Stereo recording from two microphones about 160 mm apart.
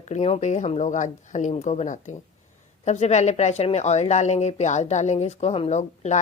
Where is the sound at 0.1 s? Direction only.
45° left (ahead or behind).